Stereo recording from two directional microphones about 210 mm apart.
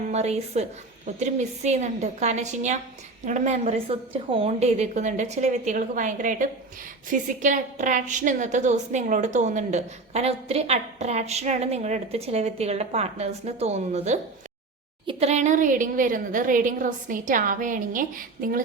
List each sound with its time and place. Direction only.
0.1 s a woman's voice: 30° right (ahead or behind)